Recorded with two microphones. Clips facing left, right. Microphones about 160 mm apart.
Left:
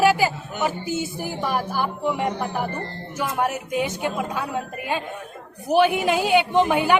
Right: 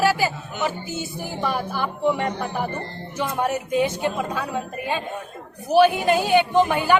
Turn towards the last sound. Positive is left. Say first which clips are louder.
# even
turn(degrees=15)  # may be behind; listen again after turning